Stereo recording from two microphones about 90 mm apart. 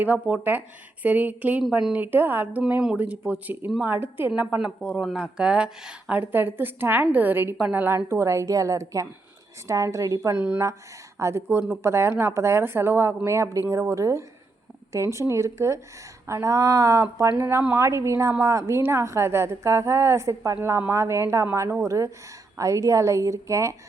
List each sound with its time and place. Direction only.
0.0 s speech: 20° right (ahead or behind)
4.4 s speech: 10° right (ahead or behind)
7.9 s a woman's voice: 30° right (ahead or behind)
10.3 s a woman's voice: 20° right (ahead or behind)